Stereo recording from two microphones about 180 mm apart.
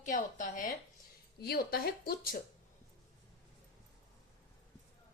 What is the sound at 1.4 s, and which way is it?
Speech, 60° left (ahead or behind).